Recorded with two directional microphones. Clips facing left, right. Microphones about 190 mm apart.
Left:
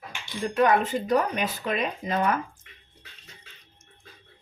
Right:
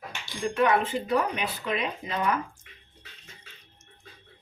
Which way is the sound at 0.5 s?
45° left (ahead or behind).